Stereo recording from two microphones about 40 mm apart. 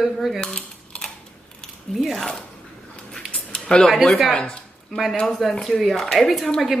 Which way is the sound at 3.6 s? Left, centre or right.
Centre.